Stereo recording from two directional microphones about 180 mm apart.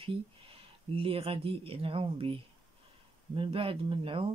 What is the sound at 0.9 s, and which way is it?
Speech, 30° right (ahead or behind).